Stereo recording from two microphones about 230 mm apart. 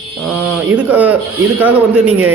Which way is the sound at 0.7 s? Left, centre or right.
Centre.